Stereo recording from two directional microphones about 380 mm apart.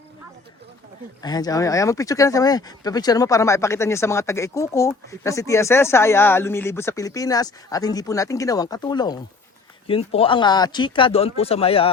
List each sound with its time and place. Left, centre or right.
1.2 s speech: centre